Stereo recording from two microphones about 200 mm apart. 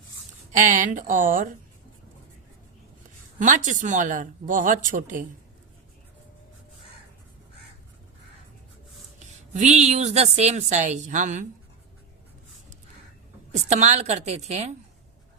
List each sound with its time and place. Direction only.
0.5 s a woman's voice: 40° right (ahead or behind)
3.3 s a woman's voice: 40° right (ahead or behind)
9.1 s a woman's voice: 35° right (ahead or behind)
13.5 s a woman's voice: 35° right (ahead or behind)